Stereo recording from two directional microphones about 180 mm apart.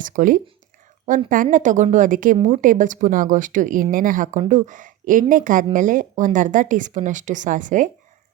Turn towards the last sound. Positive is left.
turn(degrees=-45)  # may be behind; listen again after turning